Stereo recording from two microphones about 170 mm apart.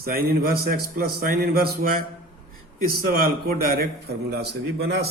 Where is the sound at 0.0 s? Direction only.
60° right (ahead or behind).